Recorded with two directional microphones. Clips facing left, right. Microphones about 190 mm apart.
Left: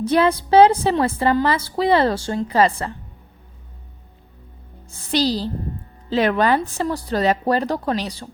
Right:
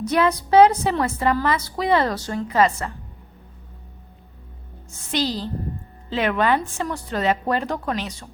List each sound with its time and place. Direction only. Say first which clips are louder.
0.0 s a woman's voice: left 3 dB; 30° left (ahead or behind)
4.9 s speech: left 4 dB; 35° left (ahead or behind)